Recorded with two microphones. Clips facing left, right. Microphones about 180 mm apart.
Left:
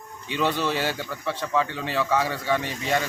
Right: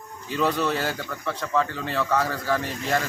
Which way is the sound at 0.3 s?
Centre (ahead or behind).